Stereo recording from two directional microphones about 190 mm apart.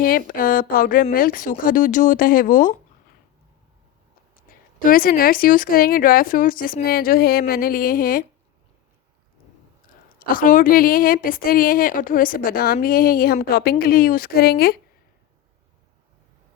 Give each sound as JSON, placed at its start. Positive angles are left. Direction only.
{"t": 0.0, "sound": "a woman's voice", "side_deg": 50}
{"t": 4.9, "sound": "a woman's voice", "side_deg": 50}
{"t": 10.3, "sound": "a woman's voice", "side_deg": 45}